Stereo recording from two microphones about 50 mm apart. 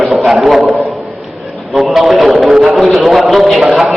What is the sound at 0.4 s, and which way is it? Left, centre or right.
Speech, centre.